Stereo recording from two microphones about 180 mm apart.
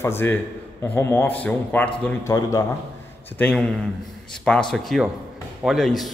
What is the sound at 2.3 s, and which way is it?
Speech, 20° left (ahead or behind).